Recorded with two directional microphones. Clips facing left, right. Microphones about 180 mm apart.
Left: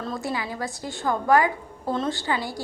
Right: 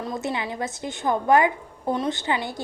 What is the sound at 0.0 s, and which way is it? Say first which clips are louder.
A woman's voice: right 1 dB; 20° right (ahead or behind).